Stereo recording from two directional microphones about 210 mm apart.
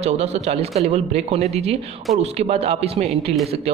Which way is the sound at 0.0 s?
30° right (ahead or behind).